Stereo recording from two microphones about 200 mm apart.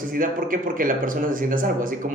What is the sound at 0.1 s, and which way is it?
Speech, 45° right (ahead or behind).